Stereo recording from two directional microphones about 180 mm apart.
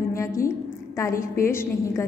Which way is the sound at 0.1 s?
15° left (ahead or behind).